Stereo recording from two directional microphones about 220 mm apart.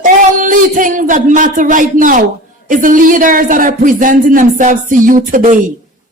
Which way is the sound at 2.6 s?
35° right (ahead or behind).